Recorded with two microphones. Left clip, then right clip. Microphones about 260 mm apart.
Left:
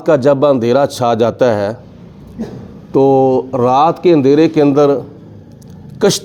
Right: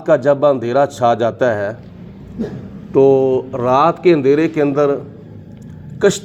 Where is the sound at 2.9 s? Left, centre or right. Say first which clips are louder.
Left 1 dB; left.